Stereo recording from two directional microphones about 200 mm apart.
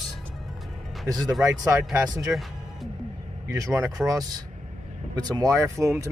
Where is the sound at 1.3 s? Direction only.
5° right (ahead or behind).